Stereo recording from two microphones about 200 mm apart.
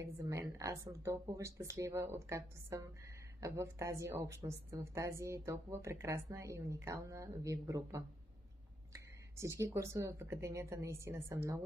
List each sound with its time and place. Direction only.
0.0 s a woman's voice: 15° right (ahead or behind)